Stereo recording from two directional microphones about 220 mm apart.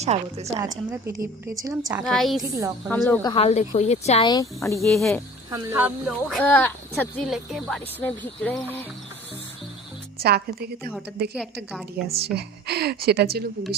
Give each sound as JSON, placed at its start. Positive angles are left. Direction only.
{"t": 0.0, "sound": "a woman's voice", "side_deg": -30}
{"t": 0.4, "sound": "a woman's voice", "side_deg": -15}
{"t": 1.9, "sound": "a woman's voice", "side_deg": 0}
{"t": 2.4, "sound": "a woman's voice", "side_deg": -15}
{"t": 2.9, "sound": "speech", "side_deg": 5}
{"t": 3.2, "sound": "speech", "side_deg": 25}
{"t": 4.9, "sound": "a woman's voice", "side_deg": 0}
{"t": 5.5, "sound": "a woman's voice", "side_deg": -10}
{"t": 6.1, "sound": "speech", "side_deg": 0}
{"t": 10.2, "sound": "a woman's voice", "side_deg": -45}